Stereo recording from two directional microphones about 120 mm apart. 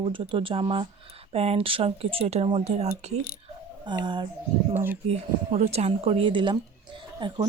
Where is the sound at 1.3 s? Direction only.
55° right (ahead or behind).